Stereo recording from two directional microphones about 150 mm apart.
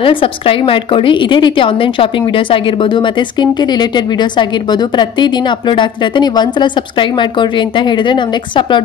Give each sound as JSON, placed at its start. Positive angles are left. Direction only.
{"t": 0.0, "sound": "a woman's voice", "side_deg": 35}